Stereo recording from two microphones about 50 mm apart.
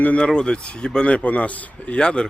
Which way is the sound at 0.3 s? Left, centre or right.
Centre.